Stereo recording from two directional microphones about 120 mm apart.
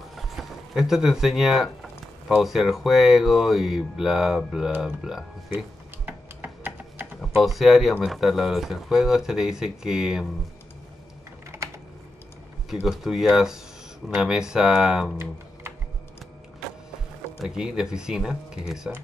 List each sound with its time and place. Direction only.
0.1 s speech: centre (ahead or behind)
6.0 s typing: 15° right (ahead or behind)
7.4 s speech: centre (ahead or behind)
11.5 s typing: 25° right (ahead or behind)
12.8 s speech: centre (ahead or behind)
17.4 s speech: 5° right (ahead or behind)